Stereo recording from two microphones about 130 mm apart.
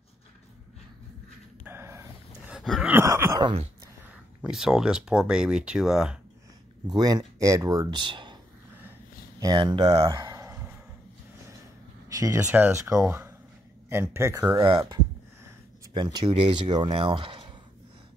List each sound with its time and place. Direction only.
1.7 s a sound: 20° right (ahead or behind)
3.3 s speech: 40° right (ahead or behind)
4.4 s speech: 5° right (ahead or behind)
6.9 s speech: 30° right (ahead or behind)
9.4 s speech: 30° right (ahead or behind)
12.1 s a sound: 25° right (ahead or behind)
12.4 s speech: 15° right (ahead or behind)
15.9 s speech: 35° right (ahead or behind)
16.3 s speech: 50° right (ahead or behind)